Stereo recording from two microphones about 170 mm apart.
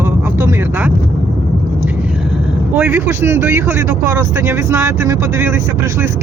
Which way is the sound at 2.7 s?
15° right (ahead or behind).